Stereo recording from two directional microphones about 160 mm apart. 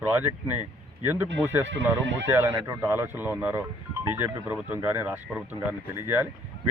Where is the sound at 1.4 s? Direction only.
15° right (ahead or behind).